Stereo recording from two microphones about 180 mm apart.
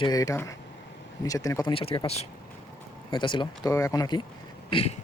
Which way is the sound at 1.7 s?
30° left (ahead or behind).